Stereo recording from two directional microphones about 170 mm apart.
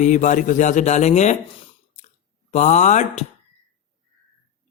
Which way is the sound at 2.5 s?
45° left (ahead or behind).